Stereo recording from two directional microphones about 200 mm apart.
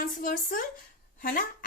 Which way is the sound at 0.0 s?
45° left (ahead or behind).